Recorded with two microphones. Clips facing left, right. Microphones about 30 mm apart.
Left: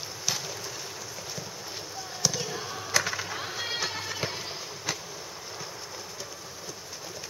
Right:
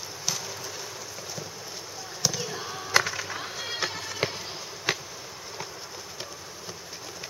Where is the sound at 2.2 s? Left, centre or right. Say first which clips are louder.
Even; centre.